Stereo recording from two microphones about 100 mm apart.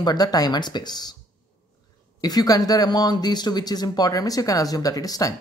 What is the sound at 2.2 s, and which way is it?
Speech, 40° left (ahead or behind).